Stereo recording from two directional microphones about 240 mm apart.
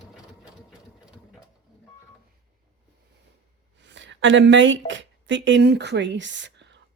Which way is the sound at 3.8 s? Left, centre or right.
Right.